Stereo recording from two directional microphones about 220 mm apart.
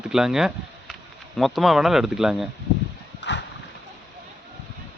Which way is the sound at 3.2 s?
50° left (ahead or behind).